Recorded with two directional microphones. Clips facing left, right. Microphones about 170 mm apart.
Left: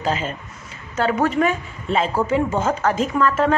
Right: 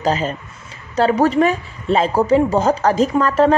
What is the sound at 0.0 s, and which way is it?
A woman's voice, 40° right (ahead or behind).